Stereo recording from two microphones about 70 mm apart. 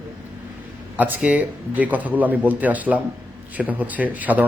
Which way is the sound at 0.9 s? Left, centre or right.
Right.